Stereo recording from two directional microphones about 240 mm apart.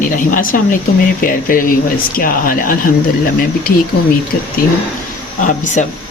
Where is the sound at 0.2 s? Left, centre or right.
Left.